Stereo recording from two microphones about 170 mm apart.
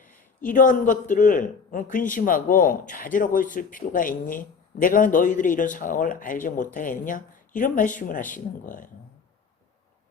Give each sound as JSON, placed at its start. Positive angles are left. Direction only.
{"t": 0.0, "sound": "a man's voice", "side_deg": 50}